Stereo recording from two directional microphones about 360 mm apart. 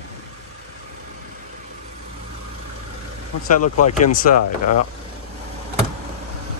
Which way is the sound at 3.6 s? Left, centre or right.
Left.